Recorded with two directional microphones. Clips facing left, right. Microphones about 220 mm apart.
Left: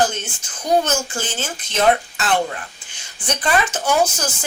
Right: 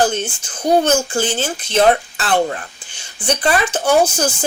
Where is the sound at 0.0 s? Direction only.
30° right (ahead or behind).